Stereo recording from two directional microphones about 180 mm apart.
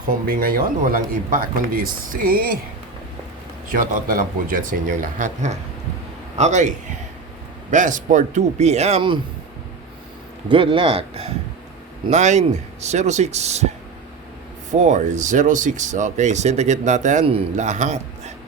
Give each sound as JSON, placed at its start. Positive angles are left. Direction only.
{"t": 0.3, "sound": "speech", "side_deg": -55}
{"t": 3.7, "sound": "speech", "side_deg": -50}
{"t": 10.5, "sound": "speech", "side_deg": -30}
{"t": 14.7, "sound": "speech", "side_deg": -45}